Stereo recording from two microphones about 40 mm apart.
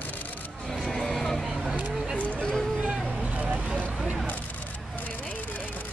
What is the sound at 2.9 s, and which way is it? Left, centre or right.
Vehicle, right.